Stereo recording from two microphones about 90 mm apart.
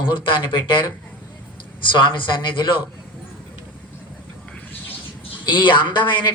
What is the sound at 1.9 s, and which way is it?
Speech, 60° left (ahead or behind).